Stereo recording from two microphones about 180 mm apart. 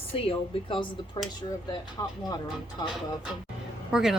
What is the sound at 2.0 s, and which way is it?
Speech, 15° left (ahead or behind).